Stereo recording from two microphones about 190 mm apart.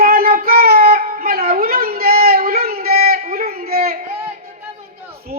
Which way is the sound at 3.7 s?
50° right (ahead or behind).